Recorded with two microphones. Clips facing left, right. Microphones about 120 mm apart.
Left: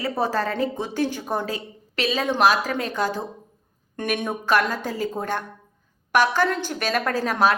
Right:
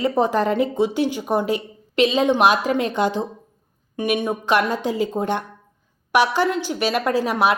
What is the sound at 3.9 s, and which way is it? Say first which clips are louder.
A woman's voice: right 4 dB; 15° right (ahead or behind).